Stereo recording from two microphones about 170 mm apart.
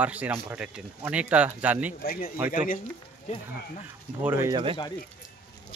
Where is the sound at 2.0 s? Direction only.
60° left (ahead or behind).